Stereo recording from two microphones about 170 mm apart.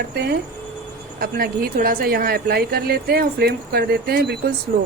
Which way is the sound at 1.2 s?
60° right (ahead or behind).